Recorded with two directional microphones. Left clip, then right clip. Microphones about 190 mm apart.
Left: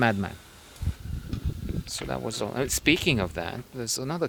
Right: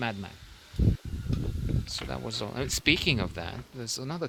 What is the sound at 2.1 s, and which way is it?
Speech, 45° left (ahead or behind).